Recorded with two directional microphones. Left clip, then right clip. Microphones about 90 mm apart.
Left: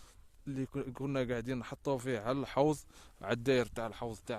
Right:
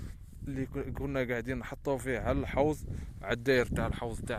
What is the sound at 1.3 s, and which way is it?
Speech, 25° left (ahead or behind).